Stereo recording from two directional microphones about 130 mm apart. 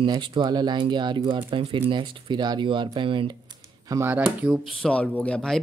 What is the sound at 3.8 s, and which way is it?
Speech, 25° right (ahead or behind).